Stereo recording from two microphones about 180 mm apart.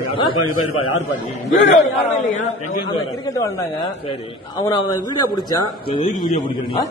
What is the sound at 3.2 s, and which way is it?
Speech, 20° left (ahead or behind).